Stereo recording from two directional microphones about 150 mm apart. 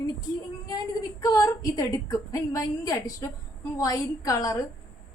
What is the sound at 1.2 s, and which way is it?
A woman's voice, 25° left (ahead or behind).